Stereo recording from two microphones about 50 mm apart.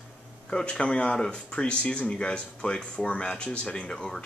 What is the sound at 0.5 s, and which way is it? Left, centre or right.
Speech, centre.